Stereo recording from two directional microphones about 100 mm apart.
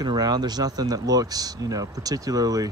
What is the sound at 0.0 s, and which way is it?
Speech, 45° right (ahead or behind).